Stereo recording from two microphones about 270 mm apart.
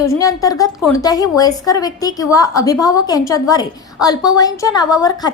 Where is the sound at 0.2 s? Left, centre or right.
Centre.